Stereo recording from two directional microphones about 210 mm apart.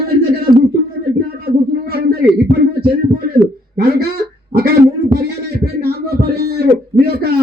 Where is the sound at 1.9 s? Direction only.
50° right (ahead or behind).